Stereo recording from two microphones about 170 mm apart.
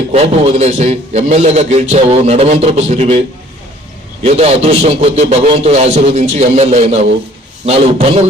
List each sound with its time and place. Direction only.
0.1 s a man's voice: 35° right (ahead or behind)